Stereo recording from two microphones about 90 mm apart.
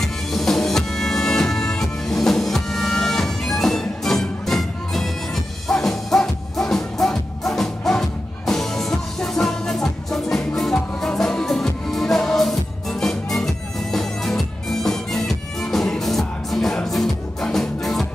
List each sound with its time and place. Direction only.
0.0 s music: centre (ahead or behind)